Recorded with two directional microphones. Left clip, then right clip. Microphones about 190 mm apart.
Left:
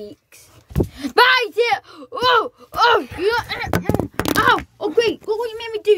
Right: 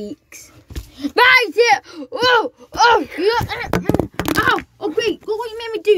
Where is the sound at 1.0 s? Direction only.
30° left (ahead or behind).